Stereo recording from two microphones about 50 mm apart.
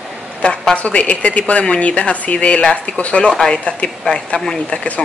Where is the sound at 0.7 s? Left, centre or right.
Left.